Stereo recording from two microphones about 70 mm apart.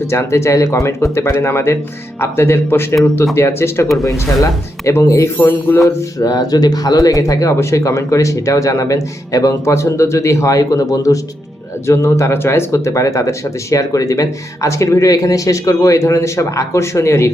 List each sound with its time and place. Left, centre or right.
0.1 s speech: left
4.9 s speech: left
5.4 s speech: left
6.1 s speech: left
11.9 s speech: left